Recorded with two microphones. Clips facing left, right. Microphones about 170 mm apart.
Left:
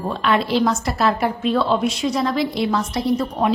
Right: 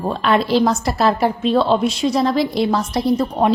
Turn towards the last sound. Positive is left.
turn(degrees=-35)  # may be behind; listen again after turning